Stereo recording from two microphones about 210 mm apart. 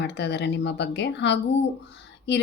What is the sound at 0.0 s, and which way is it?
A woman's voice, 55° left (ahead or behind).